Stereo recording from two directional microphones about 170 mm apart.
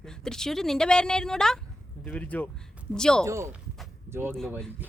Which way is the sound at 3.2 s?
15° right (ahead or behind).